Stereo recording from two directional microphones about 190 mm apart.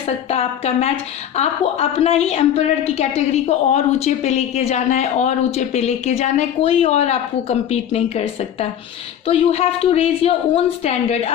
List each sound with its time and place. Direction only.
0.3 s a woman's voice: 30° left (ahead or behind)